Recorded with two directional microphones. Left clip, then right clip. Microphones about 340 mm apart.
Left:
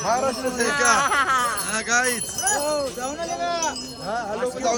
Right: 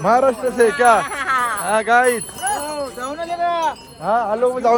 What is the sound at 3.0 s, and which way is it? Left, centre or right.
Speech, centre.